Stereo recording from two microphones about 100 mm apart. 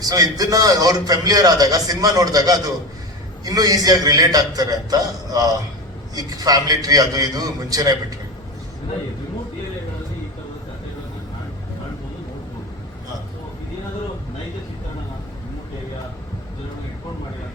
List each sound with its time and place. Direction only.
0.0 s a man's voice: 35° right (ahead or behind)